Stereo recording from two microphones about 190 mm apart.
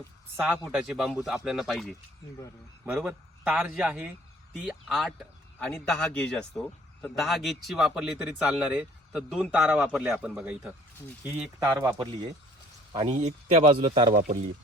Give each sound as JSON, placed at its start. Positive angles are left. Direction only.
{"t": 0.3, "sound": "a man's voice", "side_deg": -10}